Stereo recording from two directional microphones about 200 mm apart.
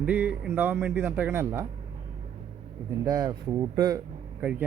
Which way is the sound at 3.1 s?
20° right (ahead or behind).